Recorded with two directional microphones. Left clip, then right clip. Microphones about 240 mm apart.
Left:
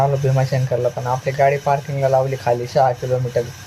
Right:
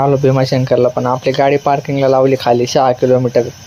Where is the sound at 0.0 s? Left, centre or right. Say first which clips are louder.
Right 7 dB; right.